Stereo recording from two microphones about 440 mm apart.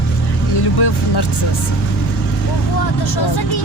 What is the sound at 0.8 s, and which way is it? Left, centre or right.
Speech, left.